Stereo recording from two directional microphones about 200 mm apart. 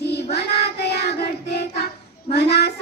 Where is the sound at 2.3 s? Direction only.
55° left (ahead or behind).